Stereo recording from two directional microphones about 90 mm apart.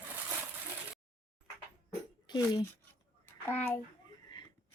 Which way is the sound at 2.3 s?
50° left (ahead or behind).